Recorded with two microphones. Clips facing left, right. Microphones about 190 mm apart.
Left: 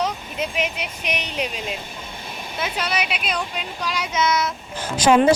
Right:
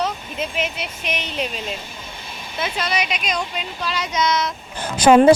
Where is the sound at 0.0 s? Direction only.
10° left (ahead or behind).